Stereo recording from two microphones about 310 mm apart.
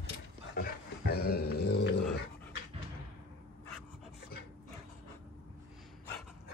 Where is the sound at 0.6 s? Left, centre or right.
Left.